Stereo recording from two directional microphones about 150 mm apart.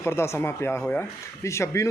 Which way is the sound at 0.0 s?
15° left (ahead or behind).